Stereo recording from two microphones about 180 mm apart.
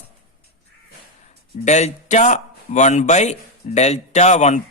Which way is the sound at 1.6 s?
40° left (ahead or behind).